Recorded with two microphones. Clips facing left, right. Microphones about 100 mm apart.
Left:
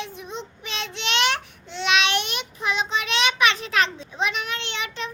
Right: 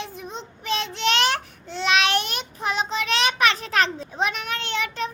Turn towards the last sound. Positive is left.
turn(degrees=-40)  # may be behind; listen again after turning